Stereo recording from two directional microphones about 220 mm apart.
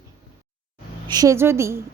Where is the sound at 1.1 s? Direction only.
15° right (ahead or behind).